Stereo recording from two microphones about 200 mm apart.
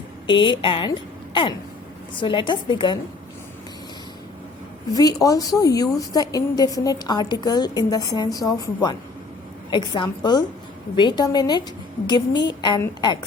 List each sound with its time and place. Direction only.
0.3 s a woman's voice: 25° left (ahead or behind)
4.9 s a woman's voice: 20° left (ahead or behind)